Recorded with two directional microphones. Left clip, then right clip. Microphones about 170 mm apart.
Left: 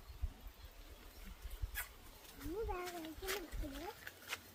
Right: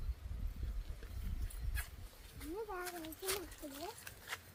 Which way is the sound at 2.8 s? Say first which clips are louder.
Right 1 dB; 70° right (ahead or behind).